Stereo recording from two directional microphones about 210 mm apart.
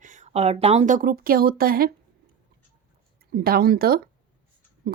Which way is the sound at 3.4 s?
45° right (ahead or behind).